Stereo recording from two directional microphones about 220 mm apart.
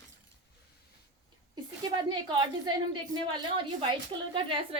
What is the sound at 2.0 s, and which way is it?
A woman's voice, 20° right (ahead or behind).